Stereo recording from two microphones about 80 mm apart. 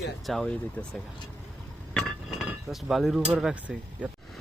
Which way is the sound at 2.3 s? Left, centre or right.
Centre.